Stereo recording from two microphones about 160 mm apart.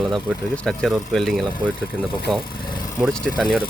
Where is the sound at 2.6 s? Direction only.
30° left (ahead or behind).